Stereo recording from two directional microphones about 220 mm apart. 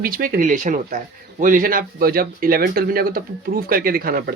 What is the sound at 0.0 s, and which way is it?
Speech, 40° right (ahead or behind).